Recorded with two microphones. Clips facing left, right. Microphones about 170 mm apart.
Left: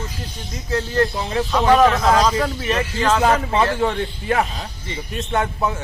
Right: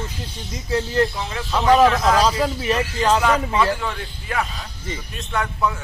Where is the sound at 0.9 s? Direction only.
35° left (ahead or behind).